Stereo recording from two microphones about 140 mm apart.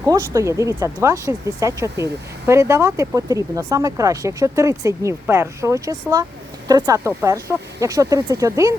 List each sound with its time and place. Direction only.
0.0 s speech: 20° right (ahead or behind)